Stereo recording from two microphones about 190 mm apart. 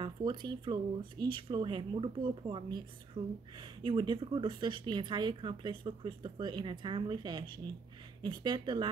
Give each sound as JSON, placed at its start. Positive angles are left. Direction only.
{"t": 0.0, "sound": "a woman's voice", "side_deg": -25}